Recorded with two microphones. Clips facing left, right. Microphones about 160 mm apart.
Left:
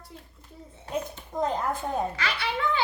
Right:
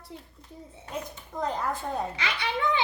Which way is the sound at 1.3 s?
20° left (ahead or behind).